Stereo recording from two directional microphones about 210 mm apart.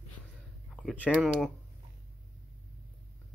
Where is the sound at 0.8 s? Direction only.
5° left (ahead or behind).